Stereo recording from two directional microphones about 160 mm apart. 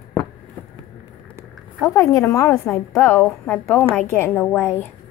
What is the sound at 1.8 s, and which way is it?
A woman's voice, 20° left (ahead or behind).